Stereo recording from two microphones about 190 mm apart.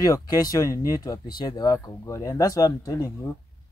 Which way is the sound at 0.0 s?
20° left (ahead or behind).